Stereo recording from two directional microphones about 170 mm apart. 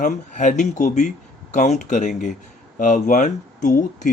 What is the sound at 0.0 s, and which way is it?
Speech, 50° left (ahead or behind).